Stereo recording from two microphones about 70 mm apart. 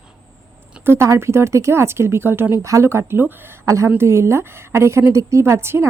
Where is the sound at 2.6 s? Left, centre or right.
Right.